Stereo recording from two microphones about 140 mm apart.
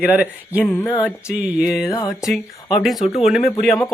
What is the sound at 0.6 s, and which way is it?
Speech, 15° left (ahead or behind).